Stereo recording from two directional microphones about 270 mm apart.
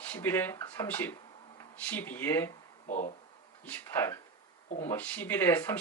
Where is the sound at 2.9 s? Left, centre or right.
Left.